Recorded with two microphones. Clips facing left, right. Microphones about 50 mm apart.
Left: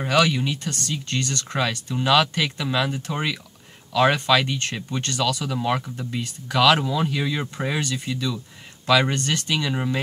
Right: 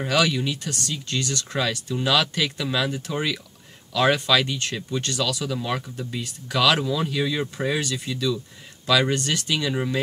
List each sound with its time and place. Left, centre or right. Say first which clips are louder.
0.0 s speech: left 2 dB; centre
0.7 s speech: left 1 dB; left
1.6 s speech: left 1 dB; centre
2.9 s speech: even; left
3.9 s speech: left 1 dB; centre
4.5 s speech: even; left
5.1 s speech: left 4 dB; centre